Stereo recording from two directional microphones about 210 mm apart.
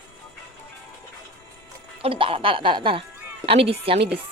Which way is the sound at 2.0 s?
25° right (ahead or behind).